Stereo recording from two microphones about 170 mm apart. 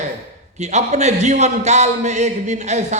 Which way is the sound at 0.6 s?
40° right (ahead or behind).